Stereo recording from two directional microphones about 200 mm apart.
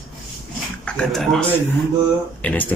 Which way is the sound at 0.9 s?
5° left (ahead or behind).